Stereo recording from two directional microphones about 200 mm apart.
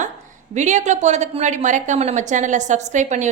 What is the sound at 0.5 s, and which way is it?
A woman's voice, 35° right (ahead or behind).